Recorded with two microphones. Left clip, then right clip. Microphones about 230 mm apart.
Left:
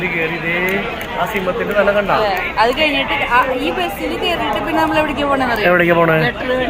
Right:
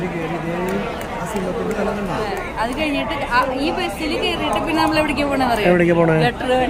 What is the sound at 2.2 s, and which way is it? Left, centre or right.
Speech, left.